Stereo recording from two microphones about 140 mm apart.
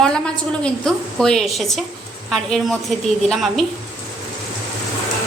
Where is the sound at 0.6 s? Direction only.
5° left (ahead or behind).